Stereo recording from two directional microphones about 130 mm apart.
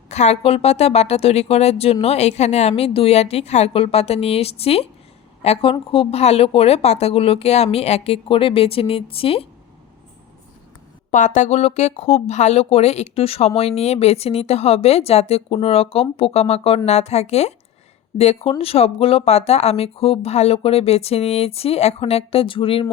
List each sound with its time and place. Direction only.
0.1 s a woman's voice: 60° left (ahead or behind)
11.1 s a woman's voice: 70° left (ahead or behind); by 22.9 s 45° left (ahead or behind)